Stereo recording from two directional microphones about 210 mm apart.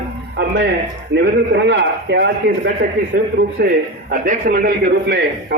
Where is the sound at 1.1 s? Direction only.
55° right (ahead or behind).